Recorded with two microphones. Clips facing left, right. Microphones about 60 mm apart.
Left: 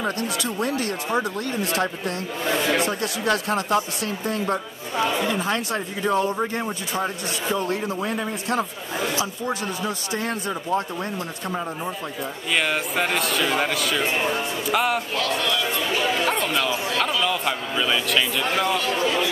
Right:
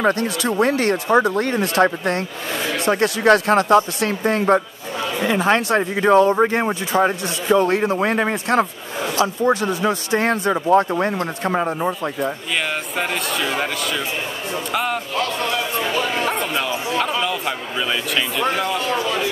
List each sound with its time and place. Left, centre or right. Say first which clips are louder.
0.0 s speech: right 7 dB; right
2.5 s a sound: left 2 dB; left
2.9 s speech: right 9 dB; right
6.4 s speech: right 8 dB; right
12.2 s speech: right 2 dB; centre
15.1 s a sound: right 2 dB; right
17.2 s a man's voice: right 1 dB; centre
18.8 s speech: right 2 dB; right